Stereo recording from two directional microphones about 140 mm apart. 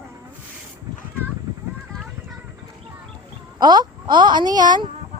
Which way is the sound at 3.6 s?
30° right (ahead or behind).